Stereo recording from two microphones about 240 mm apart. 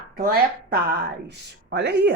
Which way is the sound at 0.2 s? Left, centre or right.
Right.